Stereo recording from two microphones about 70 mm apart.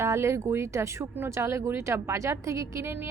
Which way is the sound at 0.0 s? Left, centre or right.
Right.